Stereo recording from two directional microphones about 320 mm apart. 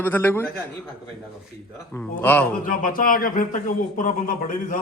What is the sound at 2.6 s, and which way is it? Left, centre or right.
A man's voice, left.